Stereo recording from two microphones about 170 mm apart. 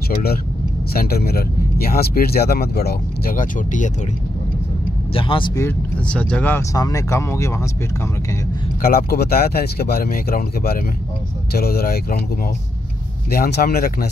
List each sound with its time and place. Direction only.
0.1 s speech: 65° left (ahead or behind); by 3.9 s 50° left (ahead or behind)
5.1 s speech: 30° left (ahead or behind)
5.6 s speech: 10° left (ahead or behind)
8.8 s speech: 65° left (ahead or behind)
13.3 s speech: 65° left (ahead or behind)